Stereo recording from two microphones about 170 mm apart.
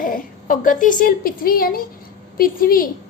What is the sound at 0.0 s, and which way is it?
A woman's voice, 50° left (ahead or behind).